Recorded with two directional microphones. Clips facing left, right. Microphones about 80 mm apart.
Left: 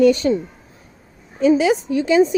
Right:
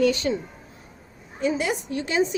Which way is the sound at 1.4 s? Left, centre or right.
Left.